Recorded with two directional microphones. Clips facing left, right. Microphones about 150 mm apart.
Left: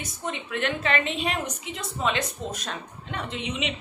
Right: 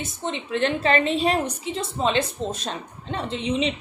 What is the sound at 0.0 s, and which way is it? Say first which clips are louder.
A woman's voice: right 4 dB; 30° right (ahead or behind).